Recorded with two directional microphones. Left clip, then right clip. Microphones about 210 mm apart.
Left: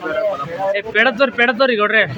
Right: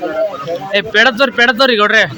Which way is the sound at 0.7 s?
15° right (ahead or behind).